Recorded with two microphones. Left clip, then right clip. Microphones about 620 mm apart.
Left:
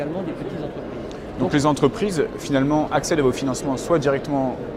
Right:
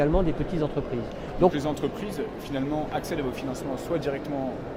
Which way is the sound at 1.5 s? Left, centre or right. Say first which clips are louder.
Left 10 dB; left.